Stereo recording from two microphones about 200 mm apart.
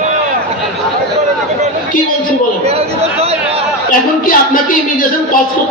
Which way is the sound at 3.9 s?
45° left (ahead or behind).